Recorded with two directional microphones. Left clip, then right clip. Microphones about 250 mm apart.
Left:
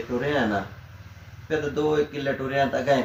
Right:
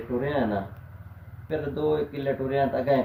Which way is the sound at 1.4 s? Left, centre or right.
Centre.